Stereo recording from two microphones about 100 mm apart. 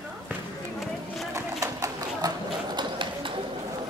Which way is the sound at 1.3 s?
35° right (ahead or behind).